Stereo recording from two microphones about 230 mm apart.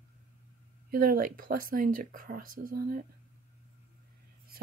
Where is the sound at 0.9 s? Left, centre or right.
Right.